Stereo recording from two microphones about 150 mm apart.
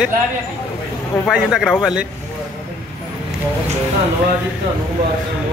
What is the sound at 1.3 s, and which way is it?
Speech, centre (ahead or behind).